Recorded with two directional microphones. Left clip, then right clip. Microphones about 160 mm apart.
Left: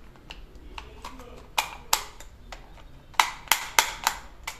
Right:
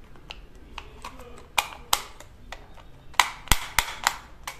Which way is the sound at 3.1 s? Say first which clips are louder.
Even; 15° right (ahead or behind).